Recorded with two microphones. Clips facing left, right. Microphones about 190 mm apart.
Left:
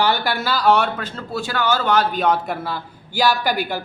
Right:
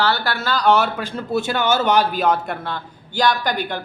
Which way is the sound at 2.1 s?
5° right (ahead or behind).